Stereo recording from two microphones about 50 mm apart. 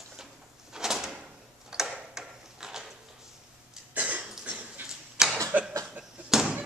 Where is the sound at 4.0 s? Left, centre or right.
Right.